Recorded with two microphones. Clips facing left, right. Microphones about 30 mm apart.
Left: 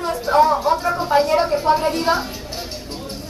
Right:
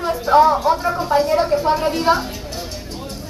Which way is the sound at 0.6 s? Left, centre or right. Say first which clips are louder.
Right 1 dB; centre.